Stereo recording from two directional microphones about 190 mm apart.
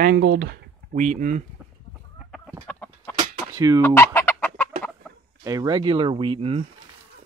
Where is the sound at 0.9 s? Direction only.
40° right (ahead or behind).